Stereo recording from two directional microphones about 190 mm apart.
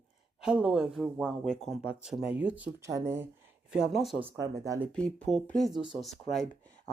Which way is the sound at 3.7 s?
Centre (ahead or behind).